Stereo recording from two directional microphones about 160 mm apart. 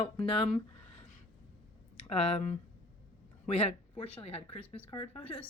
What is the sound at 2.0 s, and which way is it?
Speech, 40° left (ahead or behind).